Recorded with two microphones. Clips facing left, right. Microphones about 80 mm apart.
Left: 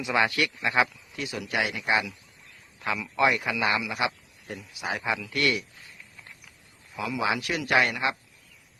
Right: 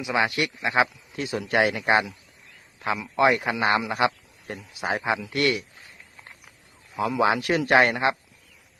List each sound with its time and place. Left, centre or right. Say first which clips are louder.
0.2 s a man's voice: right 1 dB; right
2.7 s a man's voice: right 3 dB; right